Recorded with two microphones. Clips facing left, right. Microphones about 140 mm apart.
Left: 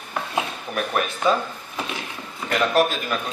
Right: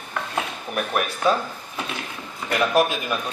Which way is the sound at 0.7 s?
5° right (ahead or behind).